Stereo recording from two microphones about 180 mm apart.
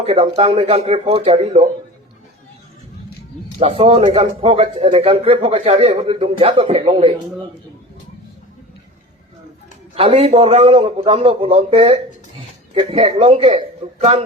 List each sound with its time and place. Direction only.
0.0 s a man's voice: 35° right (ahead or behind)
3.6 s a man's voice: 35° right (ahead or behind)
9.9 s a man's voice: 30° right (ahead or behind)